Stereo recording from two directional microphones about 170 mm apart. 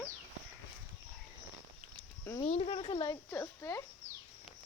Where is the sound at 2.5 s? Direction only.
35° left (ahead or behind).